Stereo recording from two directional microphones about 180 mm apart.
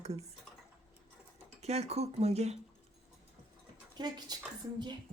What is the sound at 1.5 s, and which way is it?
Speech, 35° right (ahead or behind).